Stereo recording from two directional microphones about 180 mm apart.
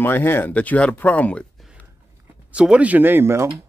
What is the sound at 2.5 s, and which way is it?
Speech, 5° right (ahead or behind).